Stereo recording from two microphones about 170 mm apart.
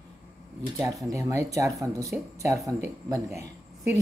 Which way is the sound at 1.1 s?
20° right (ahead or behind).